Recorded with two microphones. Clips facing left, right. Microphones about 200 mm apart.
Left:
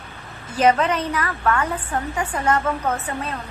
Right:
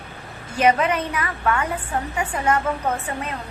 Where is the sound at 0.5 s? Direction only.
10° right (ahead or behind).